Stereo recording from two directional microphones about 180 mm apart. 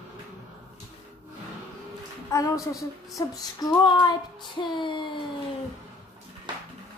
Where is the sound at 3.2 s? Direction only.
25° left (ahead or behind).